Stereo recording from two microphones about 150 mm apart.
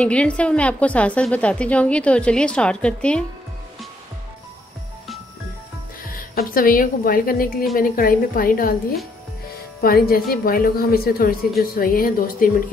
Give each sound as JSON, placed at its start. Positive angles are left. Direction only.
{"t": 0.0, "sound": "a woman's voice", "side_deg": 10}
{"t": 6.1, "sound": "a woman's voice", "side_deg": 70}
{"t": 9.8, "sound": "a woman's voice", "side_deg": 80}